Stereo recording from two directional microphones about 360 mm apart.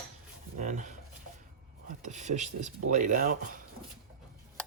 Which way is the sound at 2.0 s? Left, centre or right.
Centre.